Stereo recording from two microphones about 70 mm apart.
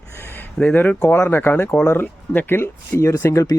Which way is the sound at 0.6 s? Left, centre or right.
Centre.